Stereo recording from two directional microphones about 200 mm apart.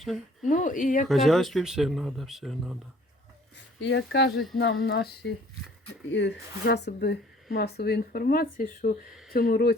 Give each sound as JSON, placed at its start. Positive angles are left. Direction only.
{"t": 0.4, "sound": "speech", "side_deg": 40}
{"t": 1.0, "sound": "speech", "side_deg": 0}
{"t": 3.8, "sound": "speech", "side_deg": 55}